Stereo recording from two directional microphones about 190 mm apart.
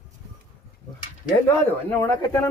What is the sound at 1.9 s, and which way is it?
Speech, 15° left (ahead or behind).